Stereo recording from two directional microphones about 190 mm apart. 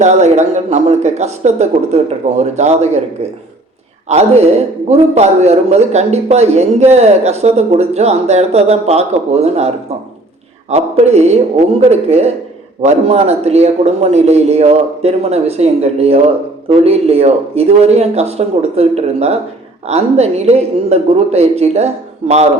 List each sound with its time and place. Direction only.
0.0 s a man's voice: 40° right (ahead or behind)
4.1 s a man's voice: 35° right (ahead or behind)